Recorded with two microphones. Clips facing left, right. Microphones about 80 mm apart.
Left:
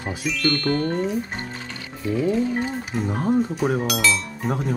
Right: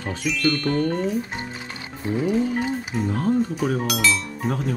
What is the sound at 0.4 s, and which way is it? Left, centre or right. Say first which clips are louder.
Speech: even; centre.